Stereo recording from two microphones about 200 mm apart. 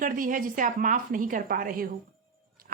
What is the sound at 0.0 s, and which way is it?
A woman's voice, 45° right (ahead or behind).